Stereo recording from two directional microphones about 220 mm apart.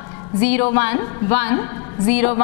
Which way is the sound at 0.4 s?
10° left (ahead or behind).